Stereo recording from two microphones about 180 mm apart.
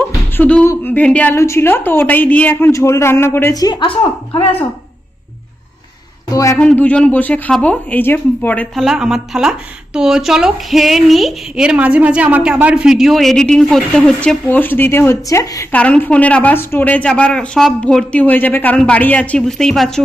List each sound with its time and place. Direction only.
0.3 s a woman's voice: 10° left (ahead or behind); by 4.4 s 30° left (ahead or behind)
6.3 s a woman's voice: 20° left (ahead or behind)
6.6 s speech: 5° left (ahead or behind)